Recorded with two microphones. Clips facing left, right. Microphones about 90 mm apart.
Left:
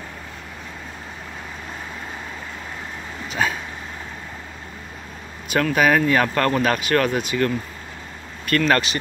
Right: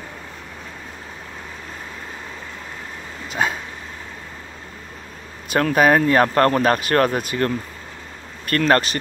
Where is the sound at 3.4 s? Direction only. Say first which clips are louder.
Right 1 dB; 25° right (ahead or behind).